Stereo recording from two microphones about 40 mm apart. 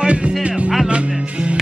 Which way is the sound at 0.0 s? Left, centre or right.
Right.